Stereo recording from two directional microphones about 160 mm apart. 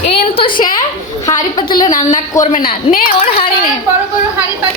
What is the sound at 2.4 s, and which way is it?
Speech, 55° left (ahead or behind).